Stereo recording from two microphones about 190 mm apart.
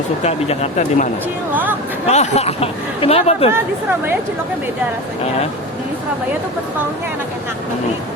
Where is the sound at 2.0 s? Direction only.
35° left (ahead or behind).